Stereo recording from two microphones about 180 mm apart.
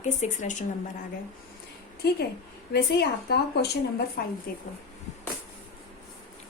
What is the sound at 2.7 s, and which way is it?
Speech, 60° left (ahead or behind).